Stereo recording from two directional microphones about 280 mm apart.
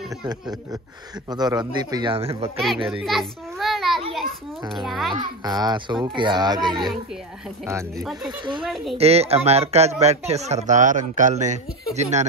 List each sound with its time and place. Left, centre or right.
0.2 s speech: centre
2.9 s a child's voice: centre
5.1 s speech: centre
7.6 s speech: centre
8.9 s speech: right